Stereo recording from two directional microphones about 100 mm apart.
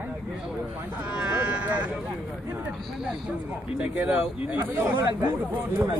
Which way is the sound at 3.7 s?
15° right (ahead or behind).